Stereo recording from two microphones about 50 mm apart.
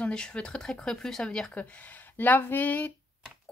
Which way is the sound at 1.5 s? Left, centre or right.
Left.